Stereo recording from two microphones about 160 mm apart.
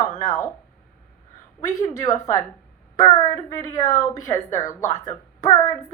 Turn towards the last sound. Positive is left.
turn(degrees=20)  # may be behind; listen again after turning